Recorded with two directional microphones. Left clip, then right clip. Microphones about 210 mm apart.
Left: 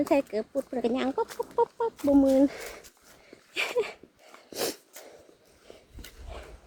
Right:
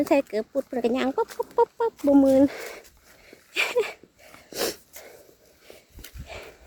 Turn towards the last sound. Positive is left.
turn(degrees=-25)  # may be behind; listen again after turning